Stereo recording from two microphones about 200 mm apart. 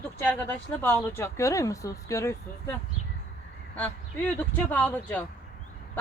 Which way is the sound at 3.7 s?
5° left (ahead or behind).